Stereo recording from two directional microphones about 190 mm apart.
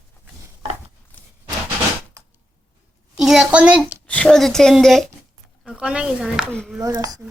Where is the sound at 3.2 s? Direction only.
Centre (ahead or behind).